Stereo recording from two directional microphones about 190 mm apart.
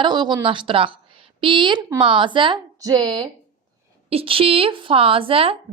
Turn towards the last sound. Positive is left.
turn(degrees=-30)  # may be behind; listen again after turning